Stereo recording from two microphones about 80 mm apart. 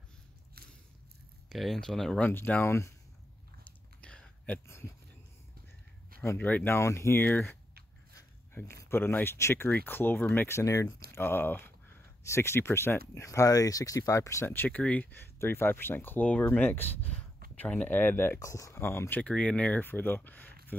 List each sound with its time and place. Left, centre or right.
1.5 s speech: centre
2.1 s speech: left
4.0 s a sound: centre
6.3 s speech: centre; by 7.2 s left
8.7 s speech: left
10.6 s speech: left
11.1 s speech: left
12.2 s speech: left
14.7 s speech: centre
15.3 s speech: left
18.4 s speech: left
18.8 s speech: left